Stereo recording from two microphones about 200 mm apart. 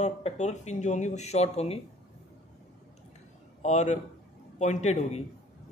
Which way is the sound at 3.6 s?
35° left (ahead or behind).